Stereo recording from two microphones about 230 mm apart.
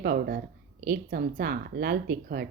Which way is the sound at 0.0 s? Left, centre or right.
Right.